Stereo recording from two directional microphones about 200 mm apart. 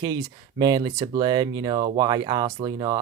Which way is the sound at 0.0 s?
20° right (ahead or behind).